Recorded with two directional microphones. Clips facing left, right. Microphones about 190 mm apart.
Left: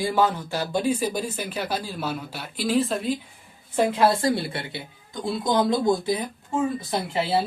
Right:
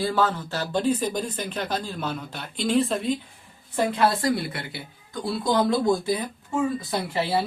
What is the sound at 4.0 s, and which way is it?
Speech, 25° left (ahead or behind).